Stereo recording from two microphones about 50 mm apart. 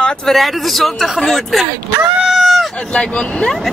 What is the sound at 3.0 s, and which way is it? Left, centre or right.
Speech, centre.